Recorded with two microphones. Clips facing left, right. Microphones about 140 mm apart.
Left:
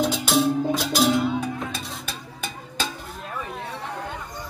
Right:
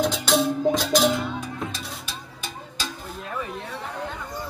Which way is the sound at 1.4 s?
55° left (ahead or behind).